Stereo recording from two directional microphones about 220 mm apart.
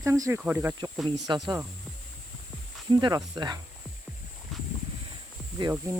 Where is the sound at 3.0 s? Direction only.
20° right (ahead or behind).